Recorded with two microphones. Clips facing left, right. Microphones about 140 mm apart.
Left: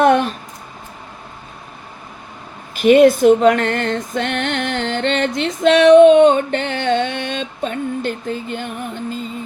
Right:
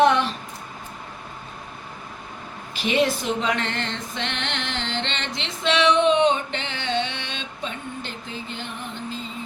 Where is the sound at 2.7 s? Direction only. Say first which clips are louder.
Left 12 dB; 50° left (ahead or behind).